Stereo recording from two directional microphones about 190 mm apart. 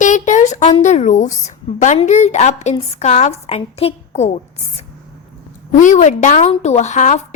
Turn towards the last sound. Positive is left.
turn(degrees=40)  # may be behind; listen again after turning